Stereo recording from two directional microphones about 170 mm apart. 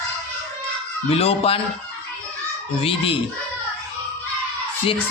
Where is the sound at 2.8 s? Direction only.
35° left (ahead or behind).